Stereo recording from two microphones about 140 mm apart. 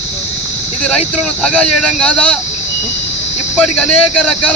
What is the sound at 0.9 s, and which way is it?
Speech, centre (ahead or behind).